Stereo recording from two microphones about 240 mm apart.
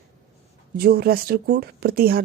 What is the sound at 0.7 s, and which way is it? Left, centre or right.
Speech, right.